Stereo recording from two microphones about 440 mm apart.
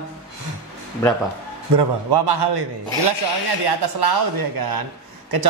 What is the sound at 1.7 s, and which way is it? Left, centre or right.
Speech, right.